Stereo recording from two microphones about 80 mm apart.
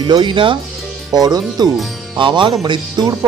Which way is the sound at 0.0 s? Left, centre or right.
Right.